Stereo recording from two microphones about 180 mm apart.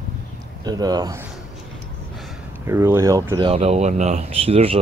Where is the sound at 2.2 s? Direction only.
Centre (ahead or behind).